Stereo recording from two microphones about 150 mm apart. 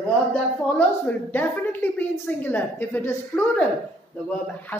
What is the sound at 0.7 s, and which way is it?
A woman's voice, 10° left (ahead or behind).